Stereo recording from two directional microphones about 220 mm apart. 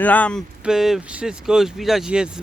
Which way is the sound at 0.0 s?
5° left (ahead or behind).